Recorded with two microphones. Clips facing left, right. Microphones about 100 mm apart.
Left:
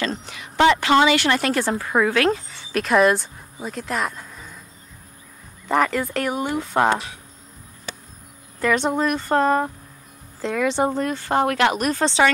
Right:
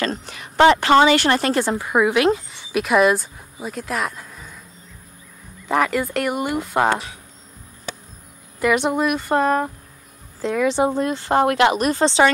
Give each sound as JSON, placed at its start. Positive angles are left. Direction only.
{"t": 0.0, "sound": "a woman's voice", "side_deg": -45}
{"t": 1.8, "sound": "speech", "side_deg": -15}
{"t": 2.8, "sound": "speech", "side_deg": -5}
{"t": 5.7, "sound": "speech", "side_deg": -5}
{"t": 8.5, "sound": "speech", "side_deg": -10}